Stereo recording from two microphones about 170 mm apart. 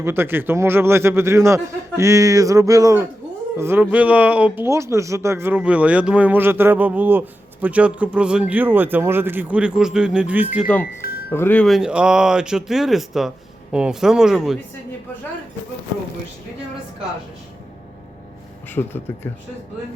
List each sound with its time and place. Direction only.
0.0 s speech: 15° right (ahead or behind)
11.3 s speech: 10° left (ahead or behind)
18.7 s speech: 15° left (ahead or behind)